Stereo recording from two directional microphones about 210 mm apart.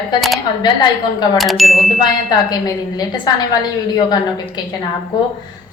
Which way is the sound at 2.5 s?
20° left (ahead or behind).